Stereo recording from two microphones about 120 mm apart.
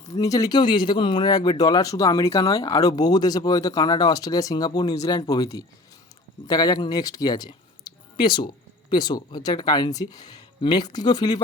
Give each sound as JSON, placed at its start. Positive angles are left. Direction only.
{"t": 0.0, "sound": "speech", "side_deg": 30}